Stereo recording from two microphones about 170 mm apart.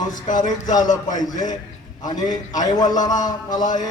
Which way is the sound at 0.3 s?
25° left (ahead or behind).